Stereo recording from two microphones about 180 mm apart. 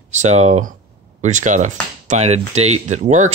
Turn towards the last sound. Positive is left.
turn(degrees=-40)  # may be behind; listen again after turning